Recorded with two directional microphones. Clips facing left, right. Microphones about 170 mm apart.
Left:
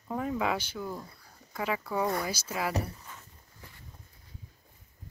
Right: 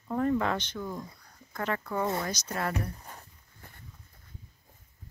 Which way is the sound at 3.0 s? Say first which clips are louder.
Right 2 dB; 35° right (ahead or behind).